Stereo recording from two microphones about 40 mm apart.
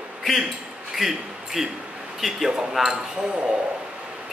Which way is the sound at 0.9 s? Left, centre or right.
Centre.